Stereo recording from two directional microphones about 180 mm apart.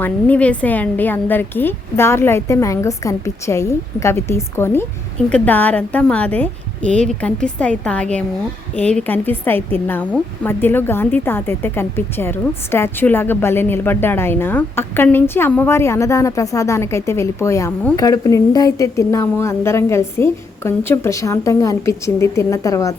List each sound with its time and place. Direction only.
0.0 s a woman's voice: 10° left (ahead or behind)